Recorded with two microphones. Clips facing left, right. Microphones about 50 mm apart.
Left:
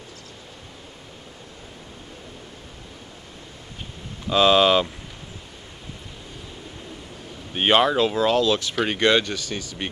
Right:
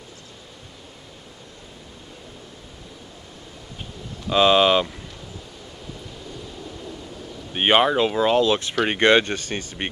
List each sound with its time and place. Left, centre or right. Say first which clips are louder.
4.3 s speech: even; centre
7.5 s speech: right 1 dB; centre; by 9.8 s right